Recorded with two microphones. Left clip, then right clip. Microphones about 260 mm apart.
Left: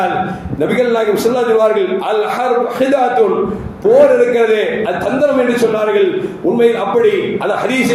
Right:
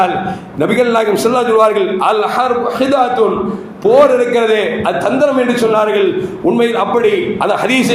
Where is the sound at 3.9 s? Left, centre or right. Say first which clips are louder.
Even; right.